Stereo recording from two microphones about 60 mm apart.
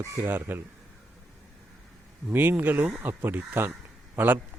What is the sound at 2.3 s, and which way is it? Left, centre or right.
Speech, right.